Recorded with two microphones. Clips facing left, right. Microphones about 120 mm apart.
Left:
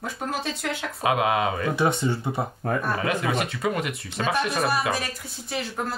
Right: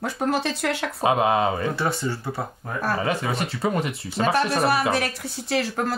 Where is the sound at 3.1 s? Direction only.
Centre (ahead or behind).